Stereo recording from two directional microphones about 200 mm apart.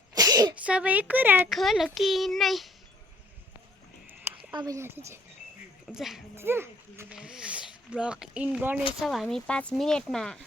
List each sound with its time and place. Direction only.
0.1 s sneeze: 15° right (ahead or behind)
0.6 s a child's voice: 5° right (ahead or behind)
4.0 s a sound: 10° right (ahead or behind)
4.5 s speech: 20° right (ahead or behind)
5.9 s a child's voice: centre (ahead or behind)